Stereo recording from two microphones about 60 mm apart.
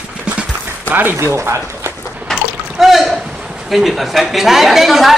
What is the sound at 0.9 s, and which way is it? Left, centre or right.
Speech, right.